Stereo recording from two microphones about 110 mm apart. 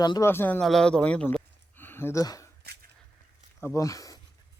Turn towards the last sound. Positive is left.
turn(degrees=30)  # may be behind; listen again after turning